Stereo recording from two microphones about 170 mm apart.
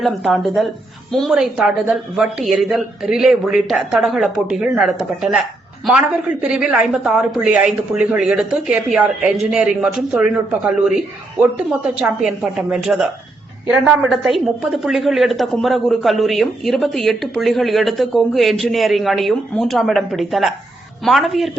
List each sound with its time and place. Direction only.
0.0 s a woman's voice: centre (ahead or behind)
11.9 s a woman's voice: 5° right (ahead or behind)